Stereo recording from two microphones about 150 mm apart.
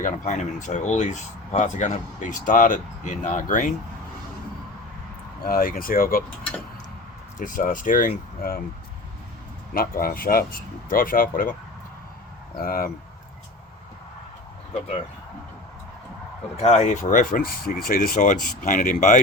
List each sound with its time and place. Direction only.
0.0 s speech: 55° left (ahead or behind)
5.4 s speech: 75° left (ahead or behind)
7.3 s speech: 60° left (ahead or behind); by 8.6 s 80° left
9.7 s speech: 70° left (ahead or behind)
12.5 s speech: 75° left (ahead or behind)
16.6 s speech: 45° left (ahead or behind)